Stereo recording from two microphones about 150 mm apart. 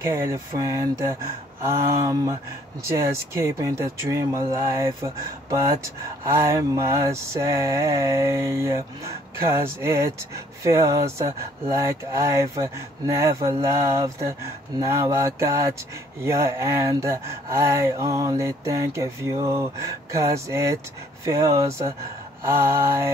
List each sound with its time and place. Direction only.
0.0 s mantra: 20° right (ahead or behind)